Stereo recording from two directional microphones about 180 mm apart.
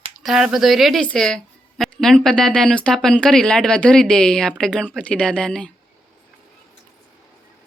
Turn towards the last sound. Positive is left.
turn(degrees=5)  # may be behind; listen again after turning